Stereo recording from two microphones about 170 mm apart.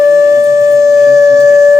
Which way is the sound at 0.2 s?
15° right (ahead or behind).